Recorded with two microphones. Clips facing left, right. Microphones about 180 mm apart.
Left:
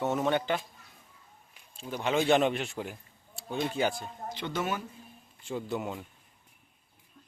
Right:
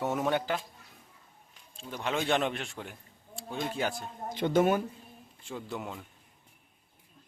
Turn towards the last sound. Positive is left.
turn(degrees=5)  # may be behind; listen again after turning